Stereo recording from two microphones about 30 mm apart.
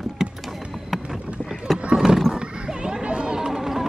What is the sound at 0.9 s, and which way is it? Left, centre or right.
Boat, centre.